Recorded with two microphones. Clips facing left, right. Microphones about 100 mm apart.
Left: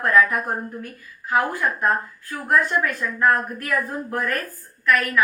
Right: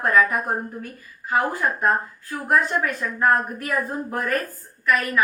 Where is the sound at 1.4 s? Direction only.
20° right (ahead or behind).